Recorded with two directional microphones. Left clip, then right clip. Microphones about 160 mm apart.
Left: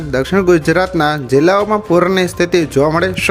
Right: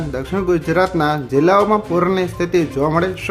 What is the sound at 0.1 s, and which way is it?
Speech, 30° left (ahead or behind).